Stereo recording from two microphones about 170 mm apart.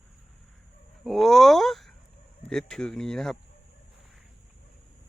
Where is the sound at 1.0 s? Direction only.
Centre (ahead or behind).